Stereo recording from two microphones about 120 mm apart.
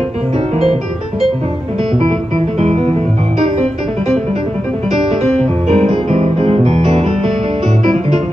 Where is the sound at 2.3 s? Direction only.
55° right (ahead or behind).